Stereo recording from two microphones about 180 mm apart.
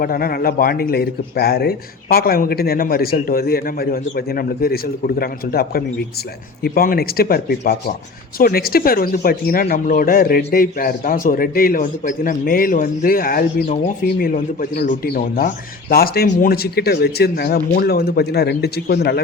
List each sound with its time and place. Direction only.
0.0 s speech: 55° left (ahead or behind)